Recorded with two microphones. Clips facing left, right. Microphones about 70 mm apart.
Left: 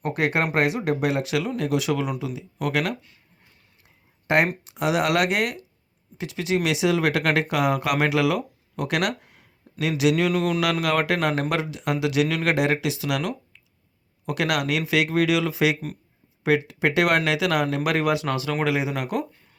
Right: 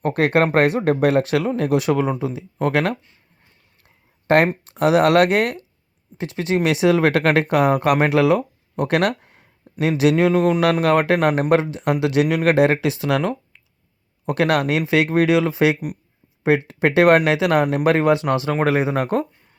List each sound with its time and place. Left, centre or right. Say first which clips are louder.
0.0 s speech: right 6 dB; right
4.3 s speech: right 5 dB; right
9.7 s a sound: right 5 dB; right
10.2 s speech: right 6 dB; right